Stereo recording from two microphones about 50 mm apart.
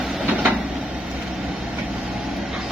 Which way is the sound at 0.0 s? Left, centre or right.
Centre.